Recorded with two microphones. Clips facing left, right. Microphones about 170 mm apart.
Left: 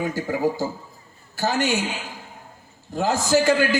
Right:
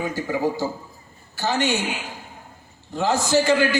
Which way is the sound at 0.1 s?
45° left (ahead or behind).